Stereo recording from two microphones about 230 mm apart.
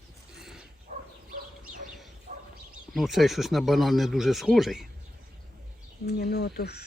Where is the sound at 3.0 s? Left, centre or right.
Centre.